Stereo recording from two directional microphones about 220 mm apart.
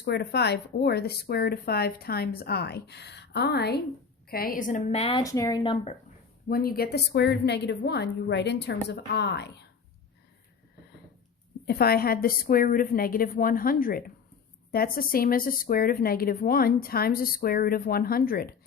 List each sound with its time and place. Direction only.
0.0 s a woman's voice: 50° left (ahead or behind); by 5.2 s 25° left (ahead or behind)
5.2 s a woman's voice: 15° left (ahead or behind)
6.5 s speech: 45° left (ahead or behind)
11.6 s a woman's voice: 45° left (ahead or behind)